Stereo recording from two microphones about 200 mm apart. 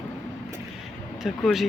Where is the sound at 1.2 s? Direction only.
Centre (ahead or behind).